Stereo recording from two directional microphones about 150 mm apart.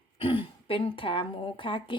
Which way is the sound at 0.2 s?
35° left (ahead or behind).